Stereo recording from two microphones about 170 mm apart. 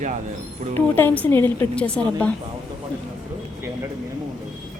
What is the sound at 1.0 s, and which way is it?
A woman's voice, 10° left (ahead or behind).